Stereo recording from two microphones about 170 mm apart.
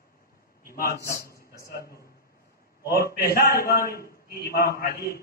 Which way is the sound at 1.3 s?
15° left (ahead or behind).